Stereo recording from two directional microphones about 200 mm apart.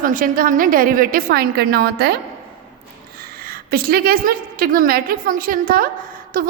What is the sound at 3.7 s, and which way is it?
A woman's voice, 50° right (ahead or behind).